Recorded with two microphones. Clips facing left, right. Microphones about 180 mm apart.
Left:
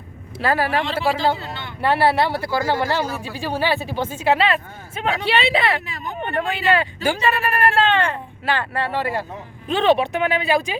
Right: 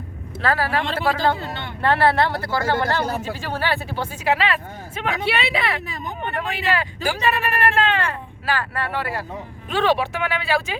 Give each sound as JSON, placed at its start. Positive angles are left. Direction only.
{"t": 0.4, "sound": "speech", "side_deg": 15}
{"t": 4.2, "sound": "a woman's voice", "side_deg": 25}